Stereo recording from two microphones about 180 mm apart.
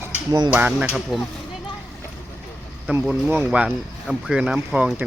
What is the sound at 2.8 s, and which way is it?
Speech, 10° right (ahead or behind).